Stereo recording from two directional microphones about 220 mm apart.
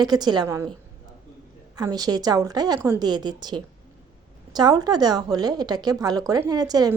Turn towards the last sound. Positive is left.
turn(degrees=-15)  # may be behind; listen again after turning